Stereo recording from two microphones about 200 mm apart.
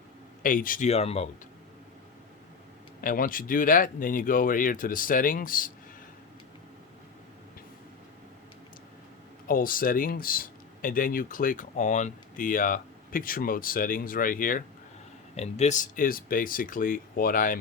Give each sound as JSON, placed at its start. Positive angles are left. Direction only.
{"t": 0.4, "sound": "speech", "side_deg": 45}
{"t": 3.0, "sound": "speech", "side_deg": 45}
{"t": 9.5, "sound": "speech", "side_deg": 45}